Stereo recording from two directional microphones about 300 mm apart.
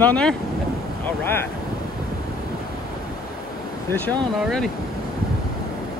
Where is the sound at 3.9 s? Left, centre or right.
Centre.